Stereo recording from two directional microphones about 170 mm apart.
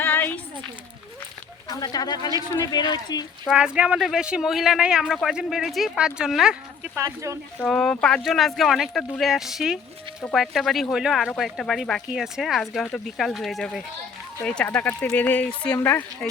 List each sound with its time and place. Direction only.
0.0 s a sound: 10° left (ahead or behind)
1.6 s speech: 20° left (ahead or behind)
3.4 s speech: 5° right (ahead or behind)
6.9 s speech: 15° right (ahead or behind)
7.6 s speech: 5° left (ahead or behind)